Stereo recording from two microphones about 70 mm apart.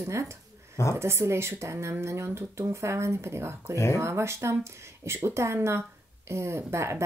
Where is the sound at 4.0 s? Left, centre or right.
Right.